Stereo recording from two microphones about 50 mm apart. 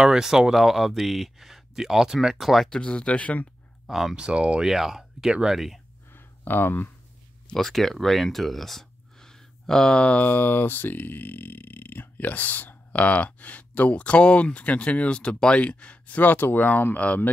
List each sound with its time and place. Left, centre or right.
0.0 s speech: centre
2.8 s speech: left
3.8 s speech: centre
4.1 s speech: centre
4.6 s speech: centre
6.1 s a sound: left
7.5 s speech: centre
9.9 s speech: left
16.2 s speech: left